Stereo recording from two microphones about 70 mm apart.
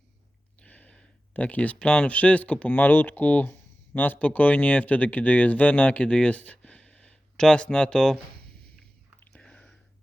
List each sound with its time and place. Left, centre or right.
0.6 s speech: centre
9.3 s chewing: centre